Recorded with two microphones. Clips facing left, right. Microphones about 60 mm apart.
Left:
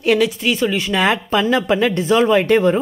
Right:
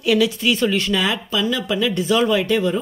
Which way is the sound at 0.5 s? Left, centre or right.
Centre.